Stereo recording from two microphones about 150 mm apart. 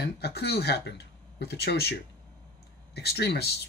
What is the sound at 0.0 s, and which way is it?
Speech, 90° left.